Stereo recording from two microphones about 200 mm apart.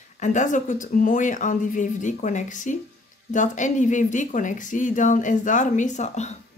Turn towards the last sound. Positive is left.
turn(degrees=35)  # may be behind; listen again after turning